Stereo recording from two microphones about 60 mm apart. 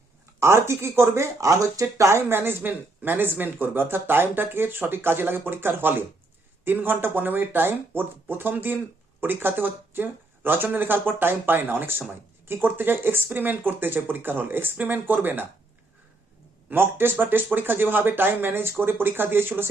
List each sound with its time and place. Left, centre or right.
0.3 s speech: right
1.4 s speech: right
2.1 s speech: right
16.6 s speech: right